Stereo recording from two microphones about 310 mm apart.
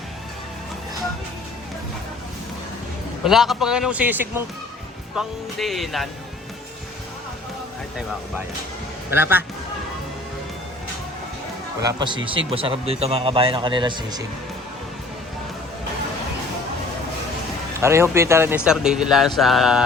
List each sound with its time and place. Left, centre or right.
3.2 s a man's voice: centre
9.0 s a man's voice: centre
11.9 s a man's voice: centre
17.7 s a man's voice: centre